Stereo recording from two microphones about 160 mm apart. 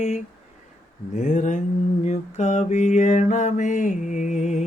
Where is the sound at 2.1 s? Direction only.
45° left (ahead or behind).